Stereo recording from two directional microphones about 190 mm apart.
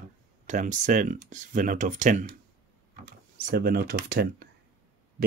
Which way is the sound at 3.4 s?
50° right (ahead or behind).